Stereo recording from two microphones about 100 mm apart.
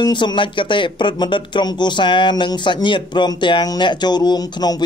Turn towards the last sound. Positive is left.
turn(degrees=45)  # may be behind; listen again after turning